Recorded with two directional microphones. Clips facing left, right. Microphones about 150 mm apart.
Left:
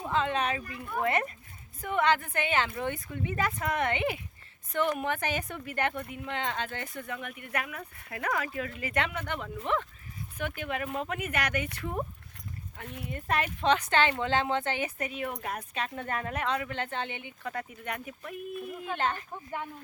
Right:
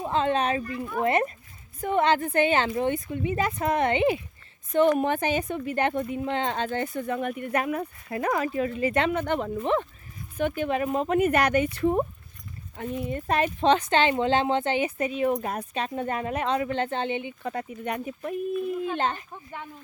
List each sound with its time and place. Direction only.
0.0 s a woman's voice: 30° right (ahead or behind)